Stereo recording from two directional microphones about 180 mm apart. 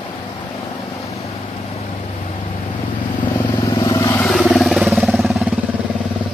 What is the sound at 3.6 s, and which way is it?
Vehicle, 15° left (ahead or behind).